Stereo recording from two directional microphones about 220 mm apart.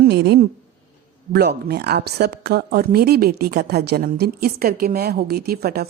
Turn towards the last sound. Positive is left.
turn(degrees=-45)  # may be behind; listen again after turning